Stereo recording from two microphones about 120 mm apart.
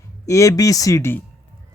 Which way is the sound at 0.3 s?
25° left (ahead or behind).